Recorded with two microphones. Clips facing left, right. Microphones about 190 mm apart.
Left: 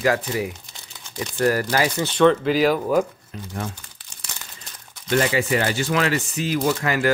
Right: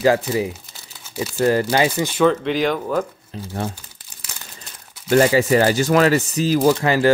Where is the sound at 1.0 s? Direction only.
5° right (ahead or behind).